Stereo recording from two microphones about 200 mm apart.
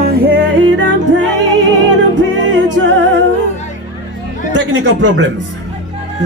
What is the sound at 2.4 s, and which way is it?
Music, 65° right (ahead or behind).